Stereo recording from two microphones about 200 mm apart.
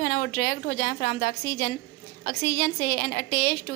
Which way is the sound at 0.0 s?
45° left (ahead or behind).